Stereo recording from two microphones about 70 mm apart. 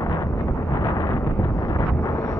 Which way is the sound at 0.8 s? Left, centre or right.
Left.